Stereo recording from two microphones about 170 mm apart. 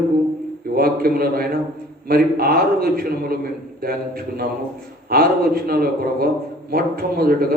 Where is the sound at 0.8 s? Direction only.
60° right (ahead or behind).